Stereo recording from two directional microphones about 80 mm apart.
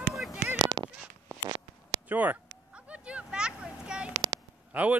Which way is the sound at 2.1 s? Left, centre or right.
Right.